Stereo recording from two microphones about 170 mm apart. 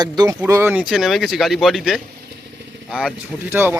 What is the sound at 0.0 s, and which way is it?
Speech, 25° right (ahead or behind).